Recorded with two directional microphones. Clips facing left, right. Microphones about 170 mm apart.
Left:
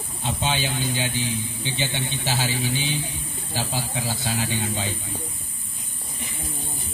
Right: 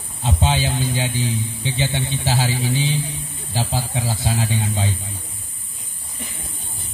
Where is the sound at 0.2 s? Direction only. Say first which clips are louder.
Right 5 dB; 30° right (ahead or behind).